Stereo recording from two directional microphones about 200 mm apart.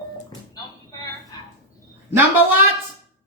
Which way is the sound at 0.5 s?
20° left (ahead or behind).